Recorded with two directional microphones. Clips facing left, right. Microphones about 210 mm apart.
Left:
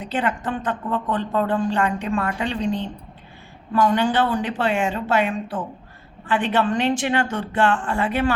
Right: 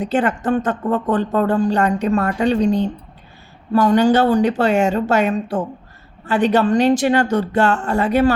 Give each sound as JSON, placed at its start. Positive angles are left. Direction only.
{"t": 0.0, "sound": "speech", "side_deg": -45}